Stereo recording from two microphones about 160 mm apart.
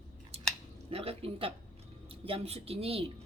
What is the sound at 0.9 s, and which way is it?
Speech, 35° right (ahead or behind).